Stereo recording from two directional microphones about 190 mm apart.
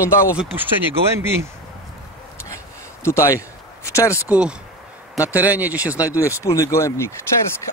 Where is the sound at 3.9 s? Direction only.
15° left (ahead or behind).